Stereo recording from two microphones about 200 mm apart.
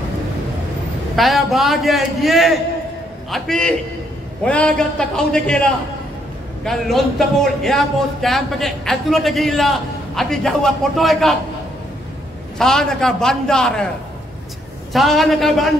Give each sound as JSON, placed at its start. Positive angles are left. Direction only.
{"t": 1.1, "sound": "speech", "side_deg": 0}
{"t": 6.6, "sound": "speech", "side_deg": 0}
{"t": 12.5, "sound": "speech", "side_deg": 5}
{"t": 14.9, "sound": "speech", "side_deg": 0}